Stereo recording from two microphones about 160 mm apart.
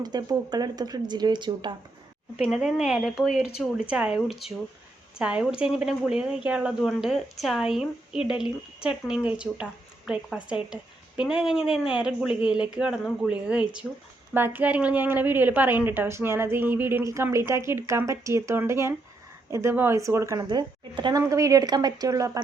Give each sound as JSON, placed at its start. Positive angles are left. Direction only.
{"t": 0.0, "sound": "a woman's voice", "side_deg": -25}
{"t": 2.5, "sound": "a woman's voice", "side_deg": -5}